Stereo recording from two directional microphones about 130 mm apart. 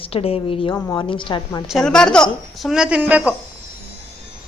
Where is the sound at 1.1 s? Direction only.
40° left (ahead or behind).